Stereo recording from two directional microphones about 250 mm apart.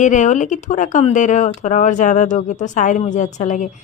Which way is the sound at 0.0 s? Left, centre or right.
Left.